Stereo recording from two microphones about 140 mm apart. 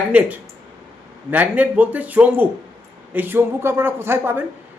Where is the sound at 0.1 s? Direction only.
10° right (ahead or behind).